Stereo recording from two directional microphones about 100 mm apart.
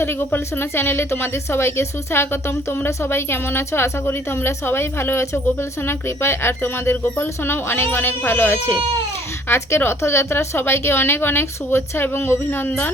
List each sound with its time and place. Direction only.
0.0 s a woman's voice: 20° left (ahead or behind)